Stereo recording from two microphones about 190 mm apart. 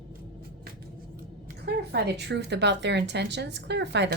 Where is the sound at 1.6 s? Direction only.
60° right (ahead or behind).